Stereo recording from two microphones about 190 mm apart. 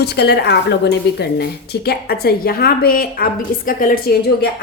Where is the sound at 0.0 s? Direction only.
60° left (ahead or behind).